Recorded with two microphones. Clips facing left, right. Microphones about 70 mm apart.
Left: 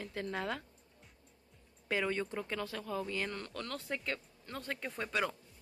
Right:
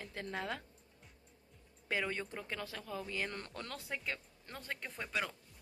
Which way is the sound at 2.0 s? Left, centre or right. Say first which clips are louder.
Left 5 dB; centre.